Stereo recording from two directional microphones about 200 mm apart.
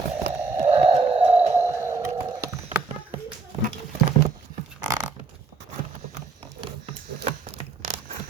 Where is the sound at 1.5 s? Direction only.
10° right (ahead or behind).